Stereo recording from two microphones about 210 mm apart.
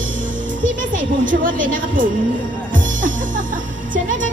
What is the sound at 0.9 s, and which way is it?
A woman's voice, 40° right (ahead or behind).